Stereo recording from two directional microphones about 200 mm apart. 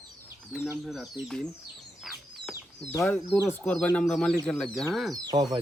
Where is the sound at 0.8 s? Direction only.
Centre (ahead or behind).